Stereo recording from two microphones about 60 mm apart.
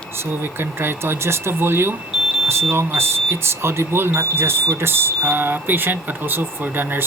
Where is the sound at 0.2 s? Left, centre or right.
Right.